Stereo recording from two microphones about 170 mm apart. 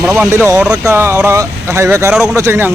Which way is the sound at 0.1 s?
15° right (ahead or behind).